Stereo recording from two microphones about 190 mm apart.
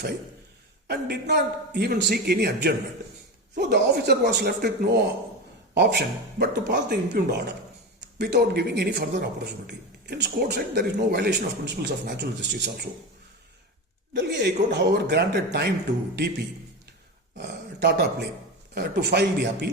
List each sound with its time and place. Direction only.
0.9 s speech: 60° right (ahead or behind)
14.1 s speech: 65° right (ahead or behind)
17.3 s speech: 60° right (ahead or behind)